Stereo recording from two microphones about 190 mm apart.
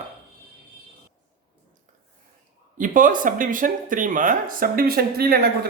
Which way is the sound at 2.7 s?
45° right (ahead or behind).